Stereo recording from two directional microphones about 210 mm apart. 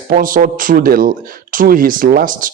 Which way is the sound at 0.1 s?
40° right (ahead or behind).